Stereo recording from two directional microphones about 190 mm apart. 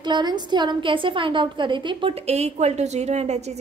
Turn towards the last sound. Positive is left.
turn(degrees=-35)  # may be behind; listen again after turning